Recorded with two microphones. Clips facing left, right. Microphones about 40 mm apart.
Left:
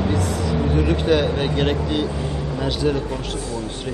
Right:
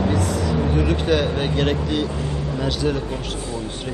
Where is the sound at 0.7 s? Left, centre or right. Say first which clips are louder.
Left 3 dB; centre.